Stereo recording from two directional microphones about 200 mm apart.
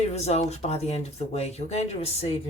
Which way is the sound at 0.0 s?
35° left (ahead or behind).